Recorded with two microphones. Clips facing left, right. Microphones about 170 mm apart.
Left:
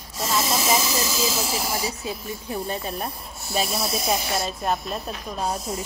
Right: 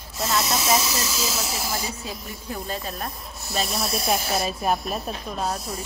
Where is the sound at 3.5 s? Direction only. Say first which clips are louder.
Left 1 dB; centre (ahead or behind).